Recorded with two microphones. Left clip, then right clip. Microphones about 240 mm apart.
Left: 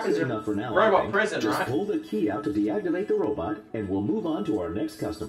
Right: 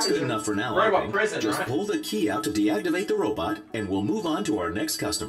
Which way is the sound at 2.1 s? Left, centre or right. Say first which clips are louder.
Right 1 dB; right.